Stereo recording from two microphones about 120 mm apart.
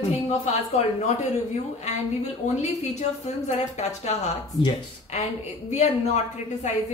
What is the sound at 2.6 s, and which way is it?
Speech, 70° left (ahead or behind).